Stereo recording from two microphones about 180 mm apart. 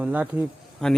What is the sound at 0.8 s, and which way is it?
Speech, 5° left (ahead or behind).